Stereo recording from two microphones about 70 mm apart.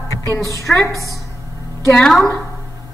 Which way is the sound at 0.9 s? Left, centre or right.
Right.